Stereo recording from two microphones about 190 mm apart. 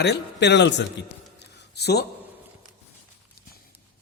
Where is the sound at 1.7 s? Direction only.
60° left (ahead or behind).